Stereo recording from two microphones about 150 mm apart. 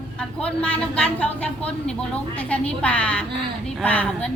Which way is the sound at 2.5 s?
10° left (ahead or behind).